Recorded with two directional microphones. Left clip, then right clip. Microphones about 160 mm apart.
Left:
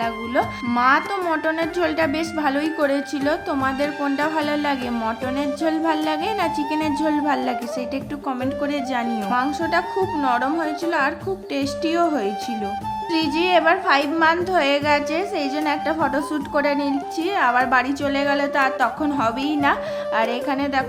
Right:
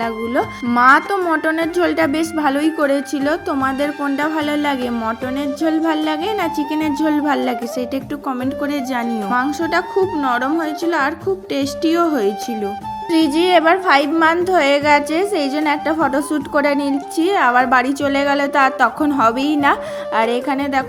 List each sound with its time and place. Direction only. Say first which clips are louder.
0.0 s speech: right 3 dB; 25° right (ahead or behind)
8.6 s a woman's voice: right 2 dB; 25° right (ahead or behind)